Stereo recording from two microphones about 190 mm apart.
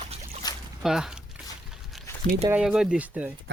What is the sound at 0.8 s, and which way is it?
Speech, centre (ahead or behind).